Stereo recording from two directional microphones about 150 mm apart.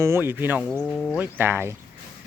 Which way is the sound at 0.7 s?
5° left (ahead or behind).